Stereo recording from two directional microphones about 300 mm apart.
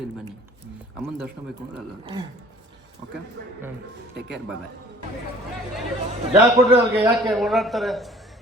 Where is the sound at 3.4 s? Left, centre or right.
Right.